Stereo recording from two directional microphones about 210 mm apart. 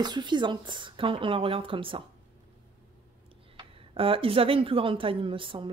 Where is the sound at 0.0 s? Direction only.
20° right (ahead or behind).